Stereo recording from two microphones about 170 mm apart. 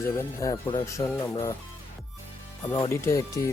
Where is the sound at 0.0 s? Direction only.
15° left (ahead or behind).